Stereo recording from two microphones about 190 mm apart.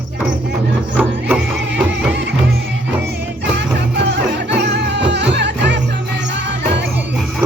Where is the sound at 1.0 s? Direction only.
5° right (ahead or behind).